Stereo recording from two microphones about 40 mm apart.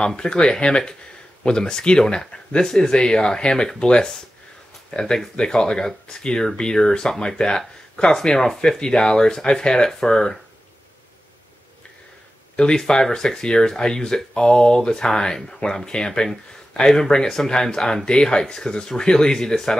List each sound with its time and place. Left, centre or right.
0.0 s speech: left
12.5 s speech: centre